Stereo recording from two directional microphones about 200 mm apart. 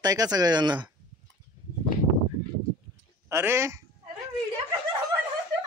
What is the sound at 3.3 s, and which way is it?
Speech, 15° right (ahead or behind).